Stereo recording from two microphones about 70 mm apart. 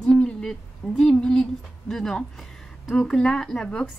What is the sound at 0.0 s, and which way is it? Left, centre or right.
A woman's voice, centre.